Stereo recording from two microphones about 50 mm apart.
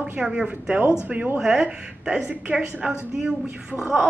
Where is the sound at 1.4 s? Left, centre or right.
Centre.